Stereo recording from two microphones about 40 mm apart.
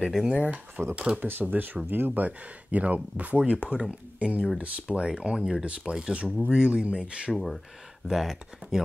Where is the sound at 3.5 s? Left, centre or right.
Right.